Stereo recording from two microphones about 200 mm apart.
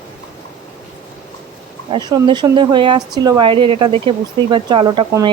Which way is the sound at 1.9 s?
20° right (ahead or behind).